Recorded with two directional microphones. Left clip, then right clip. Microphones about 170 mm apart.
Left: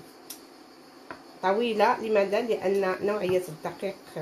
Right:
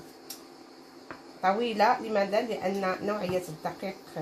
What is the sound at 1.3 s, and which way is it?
Speech, 35° left (ahead or behind).